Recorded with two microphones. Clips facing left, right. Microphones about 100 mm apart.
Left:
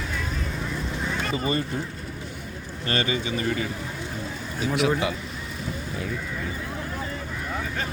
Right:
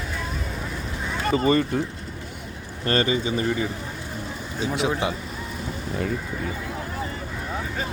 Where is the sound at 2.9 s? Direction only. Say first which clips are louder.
Right 4 dB; 35° right (ahead or behind).